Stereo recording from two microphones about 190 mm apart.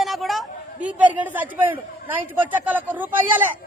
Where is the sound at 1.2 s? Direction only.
10° right (ahead or behind).